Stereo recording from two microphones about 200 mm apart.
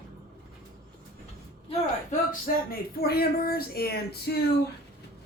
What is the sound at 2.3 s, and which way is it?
Speech, 45° left (ahead or behind).